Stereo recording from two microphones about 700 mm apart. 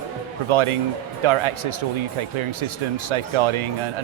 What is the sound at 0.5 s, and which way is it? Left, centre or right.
Speech, right.